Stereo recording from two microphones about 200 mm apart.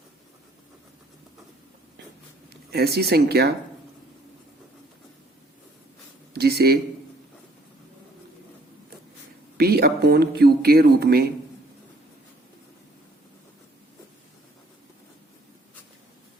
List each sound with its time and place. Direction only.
2.6 s speech: 50° right (ahead or behind)
6.3 s a sound: 55° right (ahead or behind)
9.6 s speech: 50° right (ahead or behind)